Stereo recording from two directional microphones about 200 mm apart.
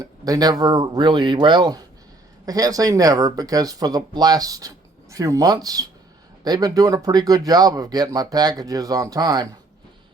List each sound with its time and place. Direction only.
0.0 s speech: 20° right (ahead or behind)